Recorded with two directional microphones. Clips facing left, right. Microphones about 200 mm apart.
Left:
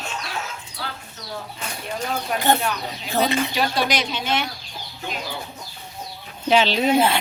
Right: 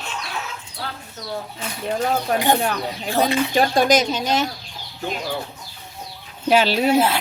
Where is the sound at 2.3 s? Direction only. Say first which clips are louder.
Left 1 dB; 15° right (ahead or behind).